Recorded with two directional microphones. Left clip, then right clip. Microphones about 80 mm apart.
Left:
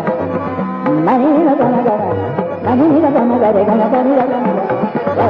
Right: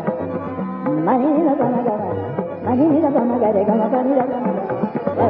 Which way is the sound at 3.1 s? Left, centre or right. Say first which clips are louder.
Left 5 dB; left.